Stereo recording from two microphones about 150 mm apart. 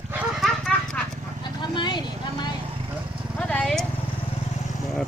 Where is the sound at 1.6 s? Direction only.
30° left (ahead or behind).